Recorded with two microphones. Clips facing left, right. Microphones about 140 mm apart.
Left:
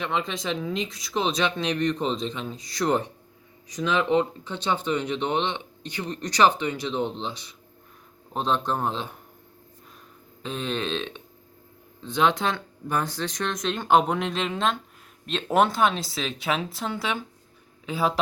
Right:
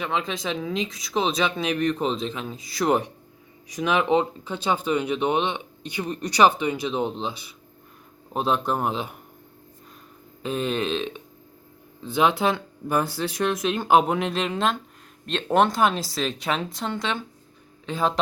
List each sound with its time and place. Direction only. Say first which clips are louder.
0.0 s speech: right 1 dB; centre (ahead or behind)
10.4 s speech: right 4 dB; 5° right (ahead or behind)